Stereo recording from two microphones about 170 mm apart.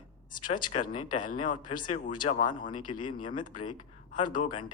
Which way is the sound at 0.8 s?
50° left (ahead or behind).